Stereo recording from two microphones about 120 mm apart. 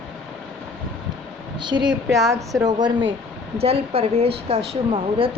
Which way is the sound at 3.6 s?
55° right (ahead or behind).